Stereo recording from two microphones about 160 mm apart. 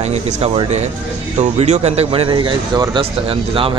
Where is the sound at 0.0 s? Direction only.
40° right (ahead or behind).